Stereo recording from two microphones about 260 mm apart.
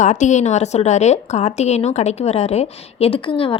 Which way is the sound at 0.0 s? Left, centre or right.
Left.